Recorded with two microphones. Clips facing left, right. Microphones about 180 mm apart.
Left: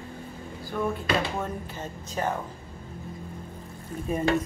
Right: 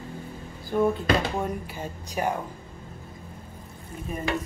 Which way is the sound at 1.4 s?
10° right (ahead or behind).